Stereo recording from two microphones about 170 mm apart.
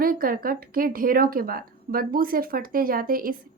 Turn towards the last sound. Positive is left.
turn(degrees=-55)  # may be behind; listen again after turning